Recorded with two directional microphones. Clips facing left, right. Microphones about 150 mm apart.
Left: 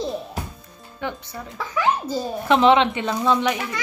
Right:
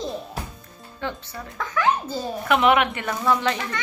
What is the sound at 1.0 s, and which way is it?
A child's voice, 15° left (ahead or behind).